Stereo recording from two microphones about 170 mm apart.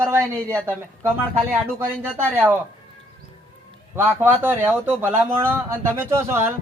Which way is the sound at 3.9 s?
15° right (ahead or behind).